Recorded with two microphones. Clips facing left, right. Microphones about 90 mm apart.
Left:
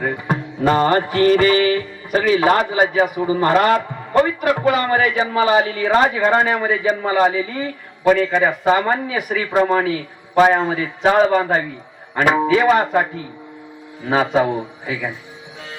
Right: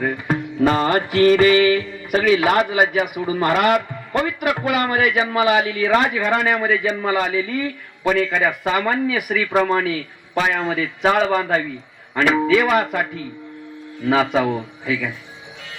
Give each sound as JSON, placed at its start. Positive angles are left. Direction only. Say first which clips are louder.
{"t": 0.0, "sound": "music", "louder": "even", "side_deg": 40}